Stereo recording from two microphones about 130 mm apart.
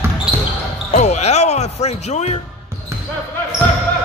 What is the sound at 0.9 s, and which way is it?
Speech, 60° left (ahead or behind).